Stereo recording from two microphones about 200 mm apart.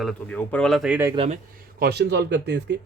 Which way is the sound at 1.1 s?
30° right (ahead or behind).